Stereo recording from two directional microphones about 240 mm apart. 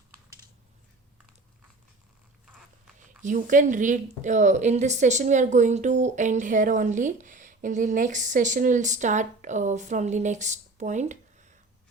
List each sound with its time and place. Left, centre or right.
3.0 s speech: right